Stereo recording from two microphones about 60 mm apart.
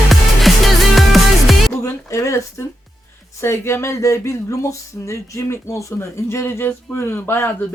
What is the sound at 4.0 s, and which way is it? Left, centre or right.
Speech, left.